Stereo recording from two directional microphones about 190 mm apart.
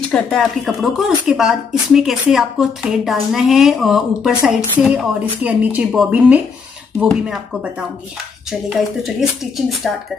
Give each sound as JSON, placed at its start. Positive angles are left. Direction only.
{"t": 0.1, "sound": "speech", "side_deg": 0}
{"t": 8.5, "sound": "speech", "side_deg": 0}